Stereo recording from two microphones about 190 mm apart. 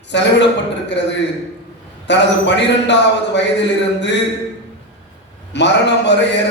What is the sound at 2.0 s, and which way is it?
A man's voice, 65° left (ahead or behind).